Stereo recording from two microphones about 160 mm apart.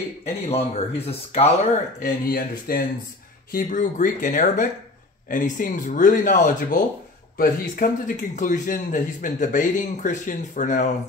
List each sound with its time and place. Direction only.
0.2 s speech: 40° left (ahead or behind)
2.0 s a man's voice: 60° left (ahead or behind)